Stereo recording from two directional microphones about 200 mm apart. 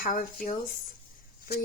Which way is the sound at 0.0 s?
45° left (ahead or behind).